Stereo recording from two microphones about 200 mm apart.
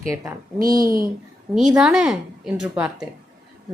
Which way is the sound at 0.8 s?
45° right (ahead or behind).